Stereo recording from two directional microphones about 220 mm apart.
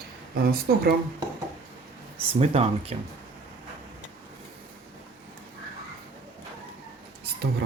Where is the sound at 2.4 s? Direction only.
25° right (ahead or behind).